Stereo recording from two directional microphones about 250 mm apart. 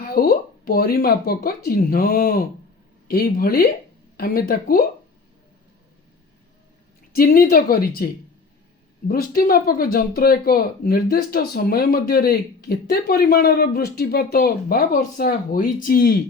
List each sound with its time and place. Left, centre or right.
0.0 s speech: left
7.2 s speech: left